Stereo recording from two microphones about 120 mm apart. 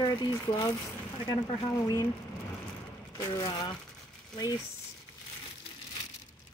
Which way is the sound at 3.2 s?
35° left (ahead or behind).